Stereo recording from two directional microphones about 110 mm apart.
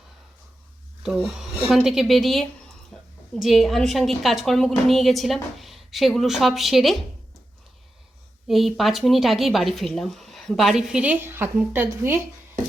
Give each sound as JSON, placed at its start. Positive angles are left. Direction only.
{"t": 1.7, "sound": "speech", "side_deg": -5}
{"t": 2.9, "sound": "a sound", "side_deg": 5}
{"t": 3.3, "sound": "speech", "side_deg": -5}
{"t": 8.4, "sound": "a woman's voice", "side_deg": 0}